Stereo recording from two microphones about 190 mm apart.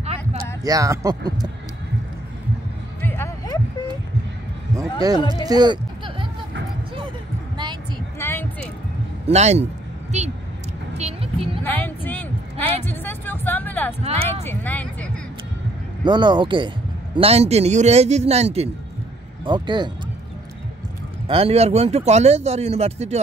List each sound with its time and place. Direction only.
0.7 s speech: 20° right (ahead or behind)
3.0 s music: 10° left (ahead or behind)
5.1 s speech: 25° left (ahead or behind)
5.4 s a sound: 20° right (ahead or behind)
8.2 s music: 10° left (ahead or behind)
9.3 s speech: 35° right (ahead or behind)
10.1 s vehicle: 35° right (ahead or behind)
11.0 s a sound: 30° right (ahead or behind)
11.6 s music: 10° left (ahead or behind)
14.0 s speech: 30° right (ahead or behind)
14.4 s speech: 10° left (ahead or behind)
16.0 s speech: 25° right (ahead or behind)
21.3 s speech: 30° right (ahead or behind)